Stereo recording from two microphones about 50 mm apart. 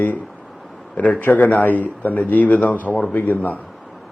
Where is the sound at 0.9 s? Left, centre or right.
Left.